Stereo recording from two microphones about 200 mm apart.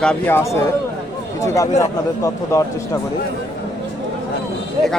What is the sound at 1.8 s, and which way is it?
A man's voice, 15° left (ahead or behind).